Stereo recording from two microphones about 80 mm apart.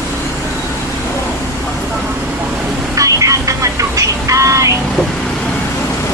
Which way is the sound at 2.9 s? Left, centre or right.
Right.